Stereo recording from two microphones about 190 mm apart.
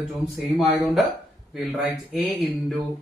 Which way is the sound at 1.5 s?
Centre (ahead or behind).